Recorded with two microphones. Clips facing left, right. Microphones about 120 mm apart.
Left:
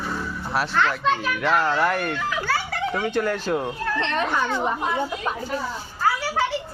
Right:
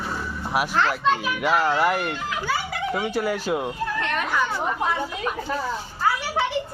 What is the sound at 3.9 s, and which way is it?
Speech, 25° left (ahead or behind).